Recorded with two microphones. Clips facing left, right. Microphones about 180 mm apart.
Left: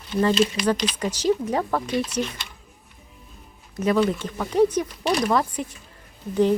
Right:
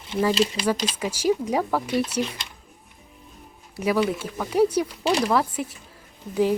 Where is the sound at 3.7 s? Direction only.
10° right (ahead or behind).